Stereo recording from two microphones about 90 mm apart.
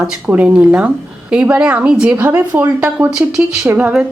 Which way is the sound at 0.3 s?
15° right (ahead or behind).